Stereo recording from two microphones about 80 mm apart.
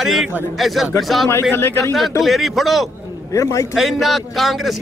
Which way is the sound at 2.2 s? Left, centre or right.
Centre.